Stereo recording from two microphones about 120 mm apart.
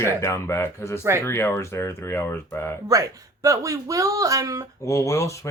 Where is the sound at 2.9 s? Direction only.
30° right (ahead or behind).